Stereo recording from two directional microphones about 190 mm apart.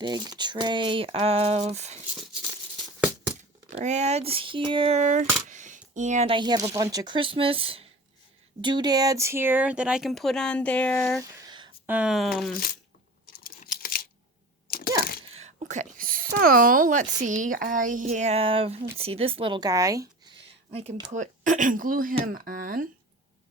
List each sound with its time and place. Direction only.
0.0 s speech: 20° right (ahead or behind)
3.7 s speech: 35° right (ahead or behind); by 11.2 s 5° left (ahead or behind)
11.2 s a sound: 15° right (ahead or behind)
11.9 s speech: 5° right (ahead or behind)
13.2 s typing: 50° left (ahead or behind)
14.7 s a sound: 50° left (ahead or behind)
15.3 s speech: 35° right (ahead or behind); by 20.3 s 20° right (ahead or behind)
20.7 s speech: 30° right (ahead or behind); by 22.9 s 50° right (ahead or behind)